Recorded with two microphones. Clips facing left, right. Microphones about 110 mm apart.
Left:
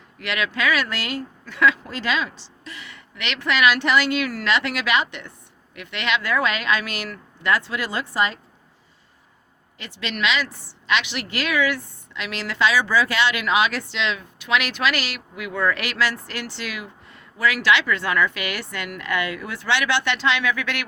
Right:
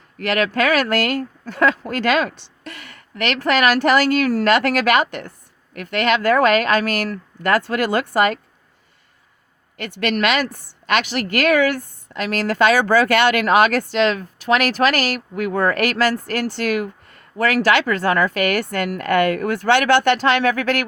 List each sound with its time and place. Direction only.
0.2 s a woman's voice: 45° right (ahead or behind)
9.7 s a woman's voice: 55° right (ahead or behind)